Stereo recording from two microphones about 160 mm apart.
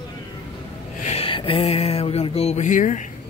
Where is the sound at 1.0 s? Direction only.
35° left (ahead or behind); by 3.0 s 50° left (ahead or behind).